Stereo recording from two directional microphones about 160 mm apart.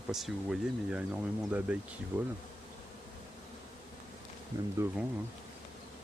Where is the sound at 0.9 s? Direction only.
10° right (ahead or behind).